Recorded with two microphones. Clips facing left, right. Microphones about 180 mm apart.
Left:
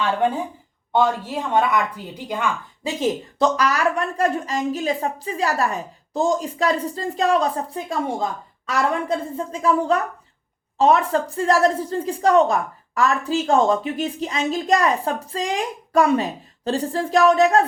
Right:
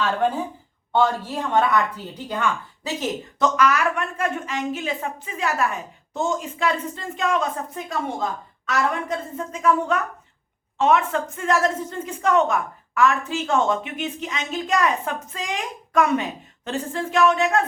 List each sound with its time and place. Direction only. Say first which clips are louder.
0.9 s a woman's voice: left 1 dB; 15° left (ahead or behind)
3.3 s a woman's voice: right 2 dB; 35° left (ahead or behind)